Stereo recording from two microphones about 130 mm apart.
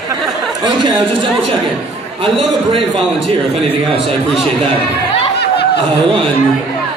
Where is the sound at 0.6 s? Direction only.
35° right (ahead or behind).